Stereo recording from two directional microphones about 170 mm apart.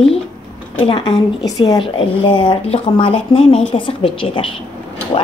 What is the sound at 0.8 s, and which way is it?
Speech, 30° left (ahead or behind).